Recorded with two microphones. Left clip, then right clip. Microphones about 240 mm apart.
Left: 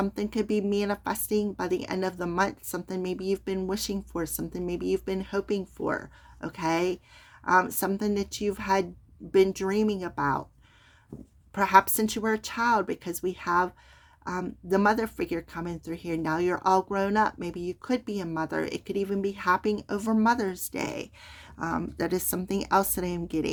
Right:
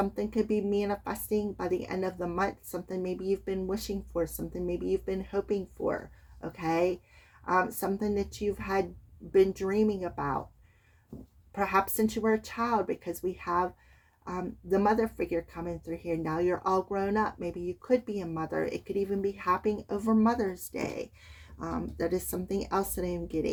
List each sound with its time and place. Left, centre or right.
0.2 s speech: left
11.5 s speech: left